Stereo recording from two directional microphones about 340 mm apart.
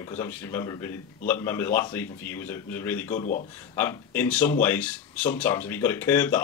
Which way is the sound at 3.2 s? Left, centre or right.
Left.